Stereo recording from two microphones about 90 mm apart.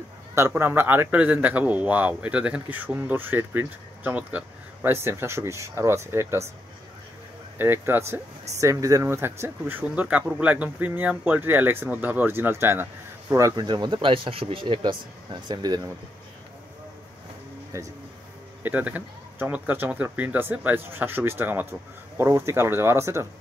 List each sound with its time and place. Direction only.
0.6 s speech: 25° right (ahead or behind)
4.9 s speech: 30° right (ahead or behind)
7.5 s speech: 25° right (ahead or behind)
13.6 s speech: 55° right (ahead or behind)
17.7 s speech: 35° right (ahead or behind)
18.6 s speech: 20° right (ahead or behind)